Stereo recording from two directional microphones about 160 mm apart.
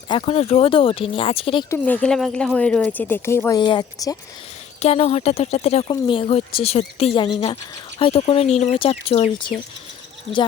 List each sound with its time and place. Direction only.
0.1 s speech: 35° left (ahead or behind)
1.7 s speech: 10° left (ahead or behind)
3.6 s speech: 25° left (ahead or behind)
4.8 s speech: 40° left (ahead or behind)